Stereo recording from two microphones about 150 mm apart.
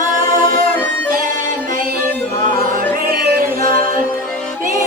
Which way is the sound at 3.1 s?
70° right (ahead or behind).